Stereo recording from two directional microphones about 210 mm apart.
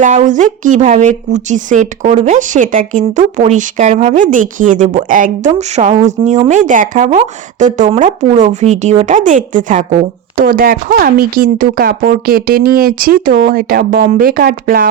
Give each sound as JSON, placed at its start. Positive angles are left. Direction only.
{"t": 0.0, "sound": "a woman's voice", "side_deg": -35}